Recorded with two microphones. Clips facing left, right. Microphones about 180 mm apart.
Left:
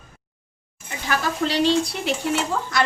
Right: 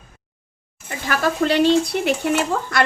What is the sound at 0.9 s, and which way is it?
Speech, 55° right (ahead or behind).